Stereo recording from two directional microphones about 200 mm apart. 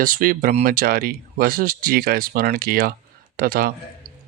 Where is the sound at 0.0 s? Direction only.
45° right (ahead or behind).